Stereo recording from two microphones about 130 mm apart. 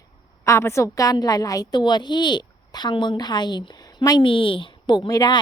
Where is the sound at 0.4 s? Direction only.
20° left (ahead or behind).